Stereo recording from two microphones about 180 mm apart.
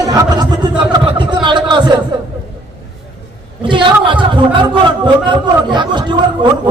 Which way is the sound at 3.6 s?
25° right (ahead or behind).